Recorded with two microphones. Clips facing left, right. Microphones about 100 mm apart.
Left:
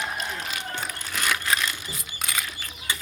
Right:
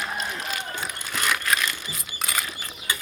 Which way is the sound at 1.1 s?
5° right (ahead or behind).